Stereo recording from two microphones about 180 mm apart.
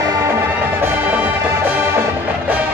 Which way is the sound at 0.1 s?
15° right (ahead or behind).